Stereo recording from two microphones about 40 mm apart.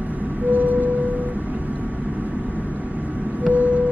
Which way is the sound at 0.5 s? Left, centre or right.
Right.